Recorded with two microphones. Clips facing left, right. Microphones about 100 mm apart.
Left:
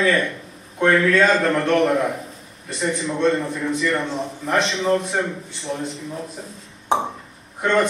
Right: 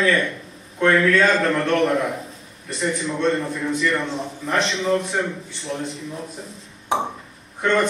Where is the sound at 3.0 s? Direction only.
Centre (ahead or behind).